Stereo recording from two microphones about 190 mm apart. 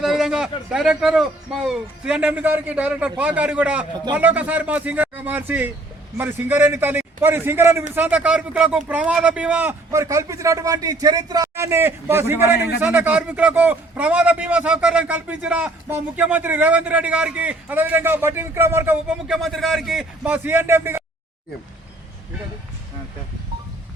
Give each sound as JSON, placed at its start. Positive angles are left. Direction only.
{"t": 0.0, "sound": "a man's voice", "side_deg": 0}
{"t": 19.4, "sound": "a man's voice", "side_deg": 0}